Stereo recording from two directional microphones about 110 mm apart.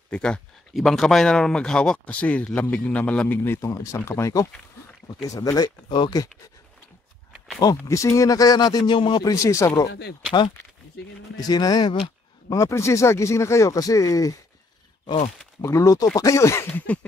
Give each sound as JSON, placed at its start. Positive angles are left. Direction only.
{"t": 0.1, "sound": "speech", "side_deg": 10}
{"t": 7.6, "sound": "speech", "side_deg": 30}
{"t": 8.9, "sound": "a man's voice", "side_deg": 50}
{"t": 9.2, "sound": "speech", "side_deg": 30}
{"t": 11.3, "sound": "speech", "side_deg": 35}
{"t": 12.4, "sound": "speech", "side_deg": 25}
{"t": 15.0, "sound": "speech", "side_deg": 60}
{"t": 15.6, "sound": "speech", "side_deg": 25}